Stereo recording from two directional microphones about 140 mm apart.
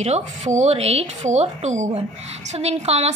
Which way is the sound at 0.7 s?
45° right (ahead or behind).